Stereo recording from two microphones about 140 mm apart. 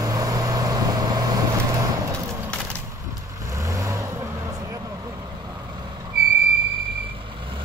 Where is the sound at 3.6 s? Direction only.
20° right (ahead or behind).